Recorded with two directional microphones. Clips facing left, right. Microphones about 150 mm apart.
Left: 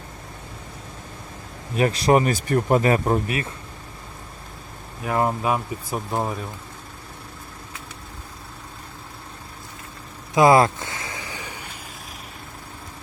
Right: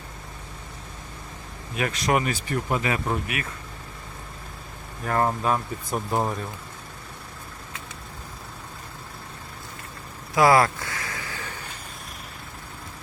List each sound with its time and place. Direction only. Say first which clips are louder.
1.7 s speech: left 6 dB; 35° left (ahead or behind)
5.0 s speech: left 1 dB; 10° left (ahead or behind)
10.3 s a sound: left 3 dB; 20° left (ahead or behind)